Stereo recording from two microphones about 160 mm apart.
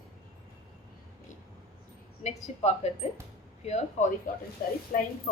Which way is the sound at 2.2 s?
45° left (ahead or behind).